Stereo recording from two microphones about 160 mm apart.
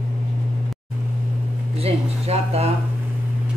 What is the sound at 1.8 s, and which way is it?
Speech, 40° right (ahead or behind).